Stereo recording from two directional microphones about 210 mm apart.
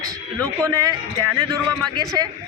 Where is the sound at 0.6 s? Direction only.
15° right (ahead or behind).